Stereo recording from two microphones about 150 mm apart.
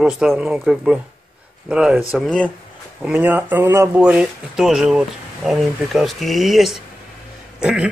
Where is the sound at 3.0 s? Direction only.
5° right (ahead or behind).